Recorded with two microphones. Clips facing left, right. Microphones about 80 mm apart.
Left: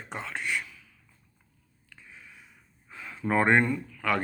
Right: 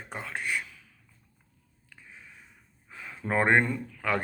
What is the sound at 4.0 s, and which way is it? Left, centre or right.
Speech, right.